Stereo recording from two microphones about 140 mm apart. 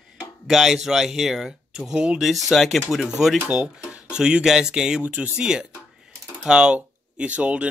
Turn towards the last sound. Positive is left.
turn(degrees=-10)  # may be behind; listen again after turning